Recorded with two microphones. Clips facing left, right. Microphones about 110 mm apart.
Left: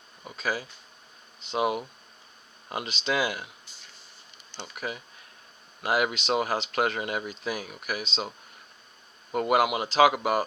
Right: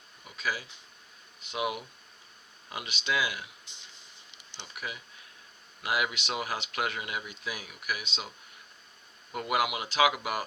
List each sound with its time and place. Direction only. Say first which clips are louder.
0.3 s speech: left 4 dB; 40° left (ahead or behind)
4.6 s speech: left 5 dB; 40° left (ahead or behind)
9.3 s speech: left 6 dB; 40° left (ahead or behind)